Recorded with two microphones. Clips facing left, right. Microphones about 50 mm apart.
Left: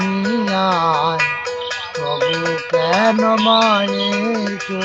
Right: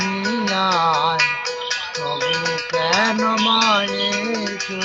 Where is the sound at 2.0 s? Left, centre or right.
Centre.